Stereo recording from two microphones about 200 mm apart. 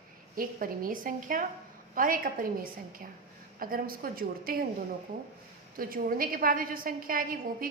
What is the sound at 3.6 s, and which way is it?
A woman's voice, 45° right (ahead or behind).